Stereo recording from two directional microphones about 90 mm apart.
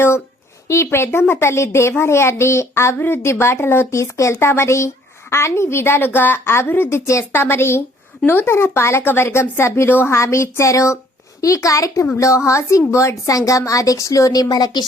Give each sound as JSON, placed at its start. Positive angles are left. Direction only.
{"t": 0.7, "sound": "a woman's voice", "side_deg": 30}